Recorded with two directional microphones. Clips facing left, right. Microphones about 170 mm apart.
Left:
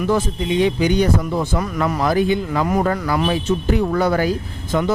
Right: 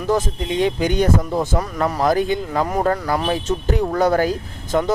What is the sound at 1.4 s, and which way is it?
Speech, 35° right (ahead or behind).